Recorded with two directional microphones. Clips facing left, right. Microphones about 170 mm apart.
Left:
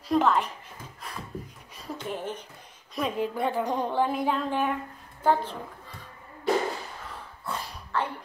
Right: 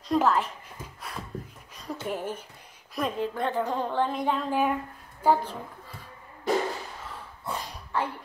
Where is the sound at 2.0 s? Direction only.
10° right (ahead or behind).